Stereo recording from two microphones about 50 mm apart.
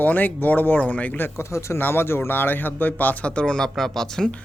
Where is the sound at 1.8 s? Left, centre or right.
Left.